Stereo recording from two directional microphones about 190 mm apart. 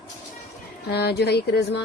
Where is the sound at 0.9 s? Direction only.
60° left (ahead or behind).